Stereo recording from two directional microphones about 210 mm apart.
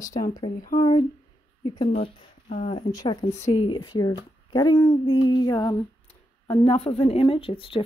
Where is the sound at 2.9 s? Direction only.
20° left (ahead or behind).